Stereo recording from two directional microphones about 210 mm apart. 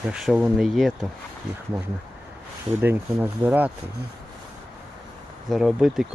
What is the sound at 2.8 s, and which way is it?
Speech, 10° right (ahead or behind).